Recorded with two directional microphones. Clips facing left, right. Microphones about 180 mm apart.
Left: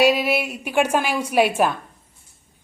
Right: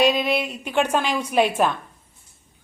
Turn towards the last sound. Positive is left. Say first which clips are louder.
# left 1 dB
turn(degrees=10)  # may be behind; listen again after turning